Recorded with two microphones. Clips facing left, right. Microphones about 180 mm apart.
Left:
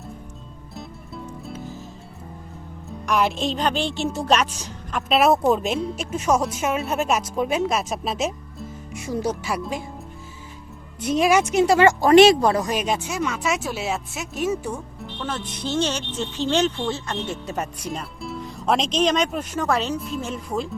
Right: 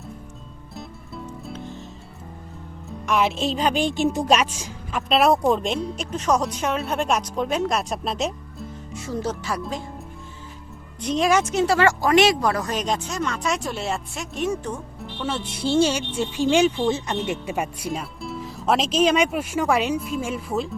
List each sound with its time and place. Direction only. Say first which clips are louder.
0.8 s music: even; centre (ahead or behind)
3.1 s a woman's voice: even; centre (ahead or behind)
8.9 s speech: left 2 dB; 15° left (ahead or behind)
11.0 s speech: left 2 dB; 5° left (ahead or behind); by 12.6 s 25° left (ahead or behind)
12.6 s a woman's voice: left 1 dB; 10° left (ahead or behind)
15.2 s speech: right 3 dB; 10° right (ahead or behind)